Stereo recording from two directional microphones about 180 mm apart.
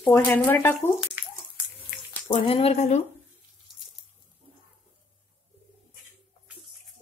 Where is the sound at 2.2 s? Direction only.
30° left (ahead or behind).